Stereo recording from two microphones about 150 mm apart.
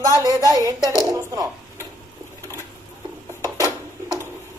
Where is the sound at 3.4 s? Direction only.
25° right (ahead or behind).